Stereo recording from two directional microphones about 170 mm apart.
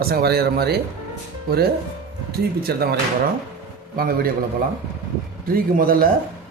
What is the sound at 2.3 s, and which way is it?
Speech, 65° right (ahead or behind).